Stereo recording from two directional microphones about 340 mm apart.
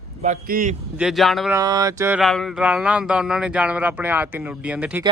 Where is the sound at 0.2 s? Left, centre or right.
Right.